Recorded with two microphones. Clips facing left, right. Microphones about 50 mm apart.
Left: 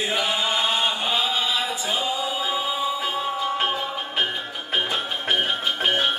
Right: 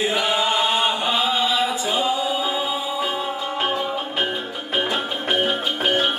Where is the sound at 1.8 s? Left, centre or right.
Centre.